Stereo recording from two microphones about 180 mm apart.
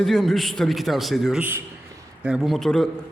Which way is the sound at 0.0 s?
Centre (ahead or behind).